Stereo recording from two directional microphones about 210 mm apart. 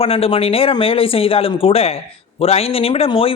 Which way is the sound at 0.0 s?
25° left (ahead or behind).